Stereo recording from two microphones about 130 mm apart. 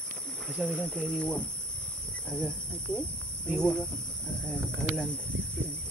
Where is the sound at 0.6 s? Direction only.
5° left (ahead or behind).